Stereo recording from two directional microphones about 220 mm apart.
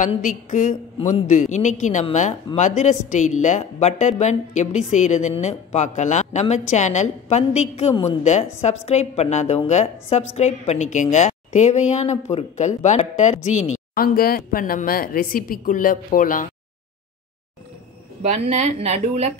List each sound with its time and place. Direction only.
0.0 s a woman's voice: 35° left (ahead or behind)
18.2 s a woman's voice: 30° right (ahead or behind)